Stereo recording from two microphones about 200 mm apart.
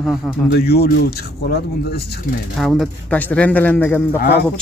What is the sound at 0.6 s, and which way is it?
Speech, 50° left (ahead or behind).